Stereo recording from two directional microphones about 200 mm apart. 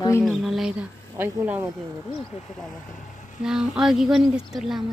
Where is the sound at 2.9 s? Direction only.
40° left (ahead or behind).